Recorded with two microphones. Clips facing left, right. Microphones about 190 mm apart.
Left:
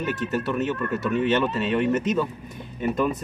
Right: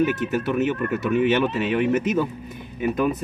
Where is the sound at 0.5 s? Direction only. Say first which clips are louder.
Right 4 dB; 15° right (ahead or behind).